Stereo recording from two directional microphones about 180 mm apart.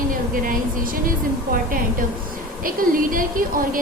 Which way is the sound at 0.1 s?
50° right (ahead or behind).